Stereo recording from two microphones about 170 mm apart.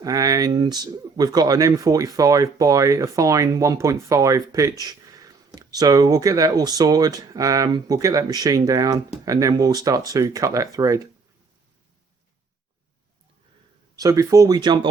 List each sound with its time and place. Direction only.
0.0 s speech: 20° right (ahead or behind)
4.8 s a sound: 20° right (ahead or behind)
5.5 s speech: 20° right (ahead or behind)
13.9 s speech: 20° right (ahead or behind)